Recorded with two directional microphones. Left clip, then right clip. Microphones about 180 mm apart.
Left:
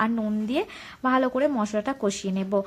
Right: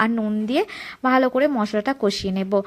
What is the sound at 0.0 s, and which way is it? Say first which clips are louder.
Speech: right 4 dB; 20° right (ahead or behind).